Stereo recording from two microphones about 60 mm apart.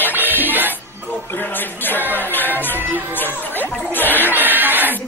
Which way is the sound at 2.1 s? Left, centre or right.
Left.